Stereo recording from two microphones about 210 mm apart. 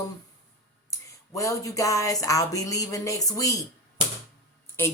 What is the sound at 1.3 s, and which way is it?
Speech, 15° left (ahead or behind).